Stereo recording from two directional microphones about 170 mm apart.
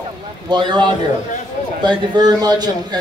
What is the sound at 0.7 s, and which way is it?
A man's voice, 25° right (ahead or behind).